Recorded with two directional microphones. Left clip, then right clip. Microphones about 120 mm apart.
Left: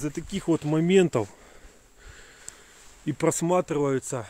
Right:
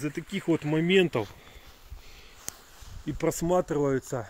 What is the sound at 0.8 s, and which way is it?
Speech, 65° left (ahead or behind).